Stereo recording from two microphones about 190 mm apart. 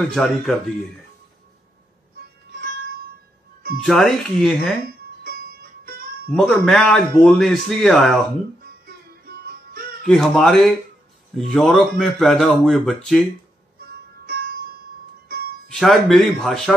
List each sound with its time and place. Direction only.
0.0 s a man's voice: centre (ahead or behind)
3.8 s a man's voice: centre (ahead or behind)
5.2 s music: 50° right (ahead or behind)
6.3 s a man's voice: centre (ahead or behind)
10.0 s a man's voice: centre (ahead or behind)
14.2 s music: 50° right (ahead or behind)
15.7 s a man's voice: centre (ahead or behind)